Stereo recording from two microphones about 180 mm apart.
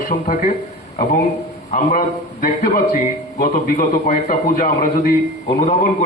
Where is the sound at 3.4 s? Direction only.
45° left (ahead or behind).